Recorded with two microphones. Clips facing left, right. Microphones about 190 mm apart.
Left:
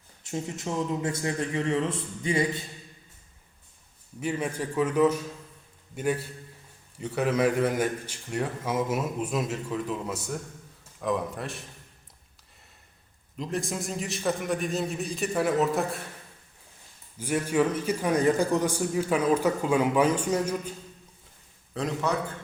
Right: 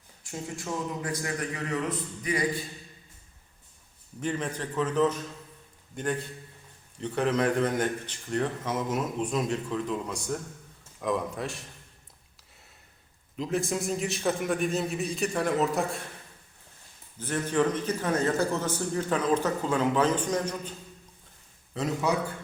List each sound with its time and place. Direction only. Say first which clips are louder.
0.2 s a man's voice: left 4 dB; 20° left (ahead or behind)
4.2 s a man's voice: left 2 dB; 10° left (ahead or behind)
13.3 s a man's voice: right 2 dB; centre (ahead or behind)
17.2 s a man's voice: left 2 dB; 10° left (ahead or behind)
21.7 s a man's voice: right 1 dB; 5° right (ahead or behind)